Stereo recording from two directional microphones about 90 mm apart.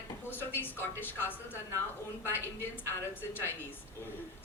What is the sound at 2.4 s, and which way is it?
Speech, 25° left (ahead or behind).